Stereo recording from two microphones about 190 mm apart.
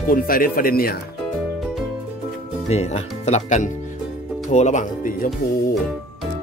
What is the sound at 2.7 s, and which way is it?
Speech, 35° left (ahead or behind).